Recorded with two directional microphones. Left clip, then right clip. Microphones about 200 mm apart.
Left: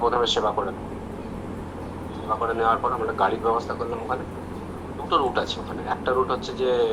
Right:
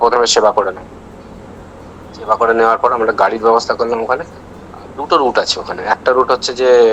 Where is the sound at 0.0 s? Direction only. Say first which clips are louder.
Right 11 dB; 60° right (ahead or behind).